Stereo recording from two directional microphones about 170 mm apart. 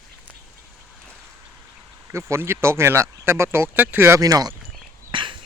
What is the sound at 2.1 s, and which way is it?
Speech, 15° right (ahead or behind).